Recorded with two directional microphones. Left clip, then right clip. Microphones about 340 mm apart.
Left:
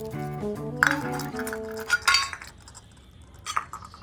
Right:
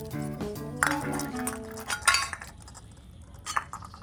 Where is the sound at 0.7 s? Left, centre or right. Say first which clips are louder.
Left 4 dB; centre.